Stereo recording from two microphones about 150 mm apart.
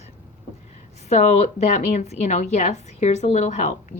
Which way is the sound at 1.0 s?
50° left (ahead or behind).